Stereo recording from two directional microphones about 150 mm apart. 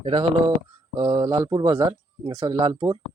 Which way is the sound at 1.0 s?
25° right (ahead or behind).